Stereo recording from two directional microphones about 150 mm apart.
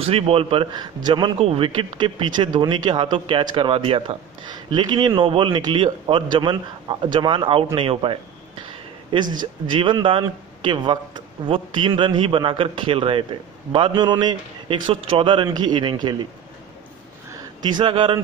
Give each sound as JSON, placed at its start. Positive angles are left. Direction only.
{"t": 0.0, "sound": "speech", "side_deg": -40}
{"t": 17.6, "sound": "speech", "side_deg": -30}